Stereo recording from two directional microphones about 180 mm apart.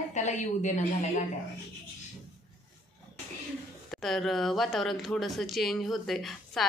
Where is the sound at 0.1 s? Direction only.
40° left (ahead or behind).